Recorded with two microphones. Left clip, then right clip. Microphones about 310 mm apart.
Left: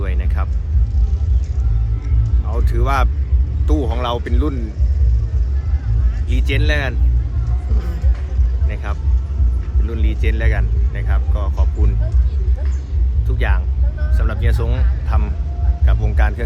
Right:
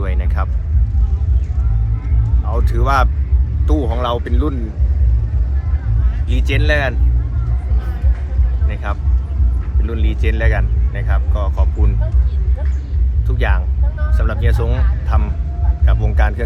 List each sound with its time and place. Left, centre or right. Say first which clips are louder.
0.0 s music: right 3 dB; centre
2.5 s music: right 3 dB; centre
3.7 s speech: right 2 dB; centre
6.2 s speech: right 3 dB; centre
8.7 s speech: right 4 dB; centre
13.2 s speech: right 3 dB; centre